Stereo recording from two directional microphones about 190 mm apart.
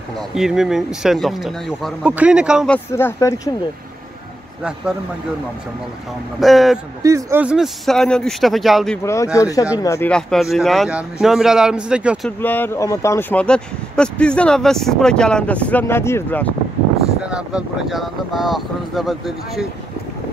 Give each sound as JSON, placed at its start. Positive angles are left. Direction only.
{"t": 0.3, "sound": "speech", "side_deg": -5}
{"t": 2.7, "sound": "speech", "side_deg": 10}
{"t": 6.4, "sound": "speech", "side_deg": 0}
{"t": 7.0, "sound": "speech", "side_deg": -15}
{"t": 9.0, "sound": "speech", "side_deg": 15}
{"t": 12.3, "sound": "speech", "side_deg": 10}
{"t": 17.2, "sound": "speech", "side_deg": -5}